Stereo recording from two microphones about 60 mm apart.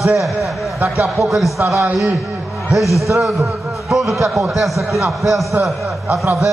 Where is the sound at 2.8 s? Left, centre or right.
Left.